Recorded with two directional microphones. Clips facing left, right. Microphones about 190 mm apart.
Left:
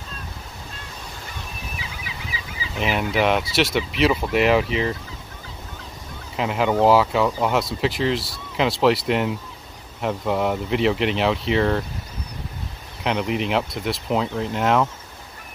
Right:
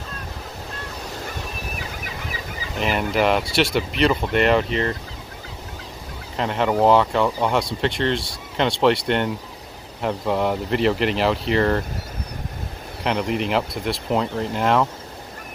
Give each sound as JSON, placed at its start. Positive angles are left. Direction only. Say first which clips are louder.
{"t": 1.8, "sound": "a sound", "louder": "right 3 dB", "side_deg": -50}
{"t": 2.8, "sound": "speech", "louder": "right 1 dB", "side_deg": 0}
{"t": 6.3, "sound": "speech", "louder": "even", "side_deg": 5}
{"t": 13.0, "sound": "speech", "louder": "even", "side_deg": 0}